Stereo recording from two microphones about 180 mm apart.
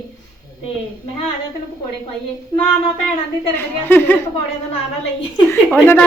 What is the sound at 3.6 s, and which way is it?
Speech, 10° left (ahead or behind).